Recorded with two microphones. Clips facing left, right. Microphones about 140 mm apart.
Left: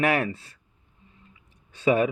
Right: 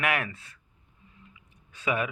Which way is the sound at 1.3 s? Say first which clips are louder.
Even; 30° left (ahead or behind).